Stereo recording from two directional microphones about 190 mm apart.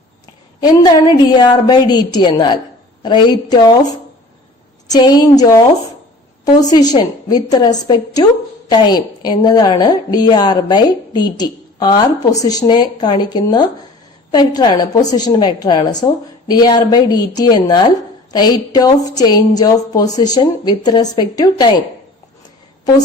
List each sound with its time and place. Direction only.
0.6 s a woman's voice: 20° left (ahead or behind)
4.9 s a woman's voice: 20° left (ahead or behind)
6.7 s a woman's voice: 20° left (ahead or behind)